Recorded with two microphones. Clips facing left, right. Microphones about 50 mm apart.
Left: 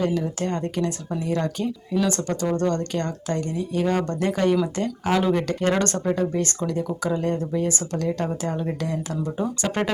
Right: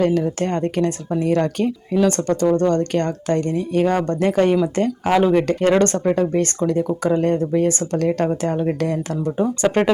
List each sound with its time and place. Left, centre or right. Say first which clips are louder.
0.0 s speech: right 6 dB; right